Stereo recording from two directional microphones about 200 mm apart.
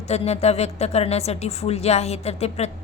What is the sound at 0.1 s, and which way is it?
A woman's voice, 30° left (ahead or behind).